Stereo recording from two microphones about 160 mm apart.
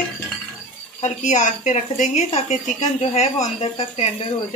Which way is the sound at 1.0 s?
50° left (ahead or behind).